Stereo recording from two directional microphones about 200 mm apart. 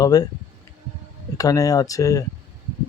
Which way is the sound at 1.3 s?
15° left (ahead or behind).